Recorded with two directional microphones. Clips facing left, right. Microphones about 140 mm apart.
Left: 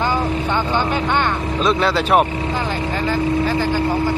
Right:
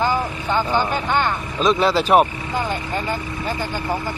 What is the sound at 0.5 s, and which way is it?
Speech, 10° right (ahead or behind).